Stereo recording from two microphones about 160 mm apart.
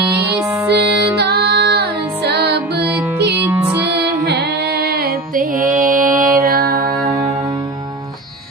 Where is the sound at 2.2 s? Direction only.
90° right.